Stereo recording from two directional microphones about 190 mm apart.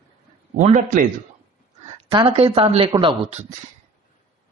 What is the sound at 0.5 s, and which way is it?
Speech, 40° right (ahead or behind).